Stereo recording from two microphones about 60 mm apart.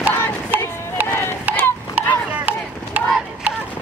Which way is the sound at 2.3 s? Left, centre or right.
Right.